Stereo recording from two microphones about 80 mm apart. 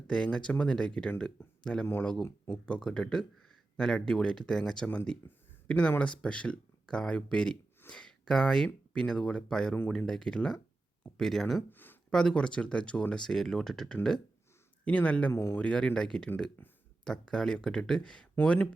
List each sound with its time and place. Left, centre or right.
0.1 s speech: centre
11.7 s a sound: left
12.1 s speech: centre
15.3 s speech: left
15.5 s speech: centre
16.6 s speech: left
17.0 s speech: centre